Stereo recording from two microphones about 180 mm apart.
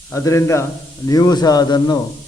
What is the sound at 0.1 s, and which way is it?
A man's voice, 15° left (ahead or behind).